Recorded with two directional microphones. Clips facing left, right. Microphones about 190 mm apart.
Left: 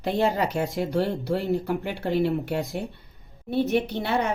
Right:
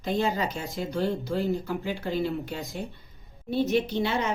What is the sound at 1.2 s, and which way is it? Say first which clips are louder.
A woman's voice: left 3 dB; 60° left (ahead or behind).